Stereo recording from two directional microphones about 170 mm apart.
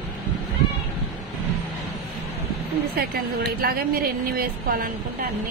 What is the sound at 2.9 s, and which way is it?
A woman's voice, 60° right (ahead or behind).